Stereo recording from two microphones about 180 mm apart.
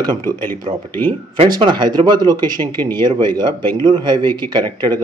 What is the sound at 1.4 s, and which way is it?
Speech, 25° right (ahead or behind).